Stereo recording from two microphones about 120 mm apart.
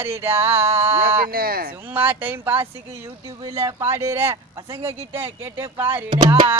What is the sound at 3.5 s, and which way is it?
Speech, 30° right (ahead or behind).